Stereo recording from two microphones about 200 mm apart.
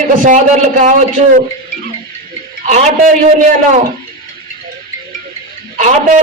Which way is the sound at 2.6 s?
35° right (ahead or behind).